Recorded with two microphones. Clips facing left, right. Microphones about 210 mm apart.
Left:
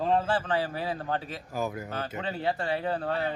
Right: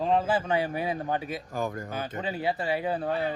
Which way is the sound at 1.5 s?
5° left (ahead or behind).